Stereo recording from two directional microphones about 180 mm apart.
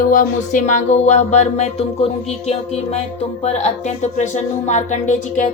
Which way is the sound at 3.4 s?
40° left (ahead or behind).